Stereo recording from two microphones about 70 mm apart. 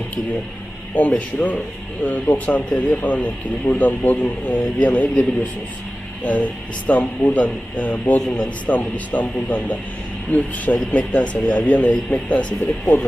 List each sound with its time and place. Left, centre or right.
0.9 s speech: left
6.2 s speech: left